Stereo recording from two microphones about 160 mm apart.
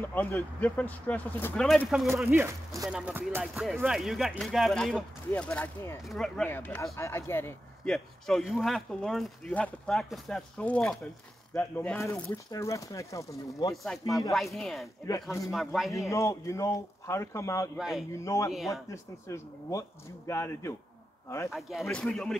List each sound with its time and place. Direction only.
0.0 s speech: 10° left (ahead or behind)
2.2 s speech: 15° right (ahead or behind); by 7.5 s 15° left (ahead or behind)
7.8 s speech: 5° left (ahead or behind); by 13.7 s 20° left (ahead or behind)
13.8 s speech: centre (ahead or behind)
16.1 s speech: 20° left (ahead or behind)
17.7 s speech: 5° right (ahead or behind)
18.1 s speech: 20° left (ahead or behind)
21.5 s speech: centre (ahead or behind)